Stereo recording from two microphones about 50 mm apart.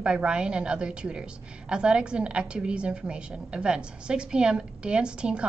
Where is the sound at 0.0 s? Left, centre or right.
Centre.